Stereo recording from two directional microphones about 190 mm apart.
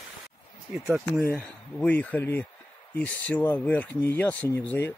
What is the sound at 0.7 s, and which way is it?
Speech, 10° right (ahead or behind).